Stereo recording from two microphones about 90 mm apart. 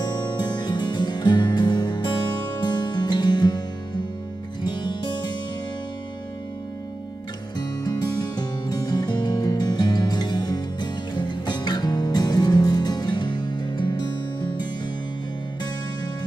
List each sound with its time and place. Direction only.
0.0 s music: 50° left (ahead or behind)
4.6 s music: 55° left (ahead or behind)
7.5 s music: 50° left (ahead or behind)